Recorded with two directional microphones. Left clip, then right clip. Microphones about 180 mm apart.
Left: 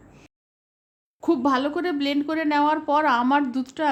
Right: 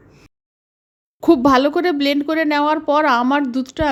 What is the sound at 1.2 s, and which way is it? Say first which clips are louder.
A woman's voice: right 9 dB; 30° right (ahead or behind).